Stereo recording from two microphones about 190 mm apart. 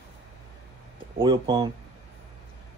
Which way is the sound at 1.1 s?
25° right (ahead or behind).